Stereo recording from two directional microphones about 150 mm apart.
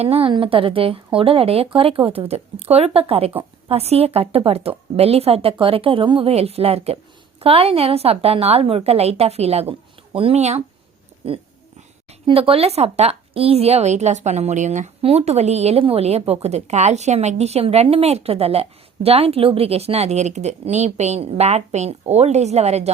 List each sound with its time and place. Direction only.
0.0 s a woman's voice: 40° right (ahead or behind)
12.2 s a woman's voice: 40° right (ahead or behind)